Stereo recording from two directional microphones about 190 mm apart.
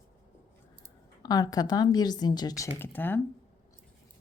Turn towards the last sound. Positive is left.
turn(degrees=10)  # may be behind; listen again after turning